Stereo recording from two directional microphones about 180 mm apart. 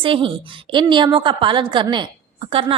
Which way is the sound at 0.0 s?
30° right (ahead or behind).